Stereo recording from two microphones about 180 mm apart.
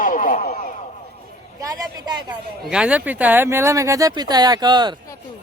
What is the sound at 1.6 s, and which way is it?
Speech, 20° right (ahead or behind).